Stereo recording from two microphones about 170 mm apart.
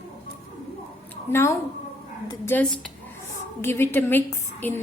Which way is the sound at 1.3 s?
15° left (ahead or behind).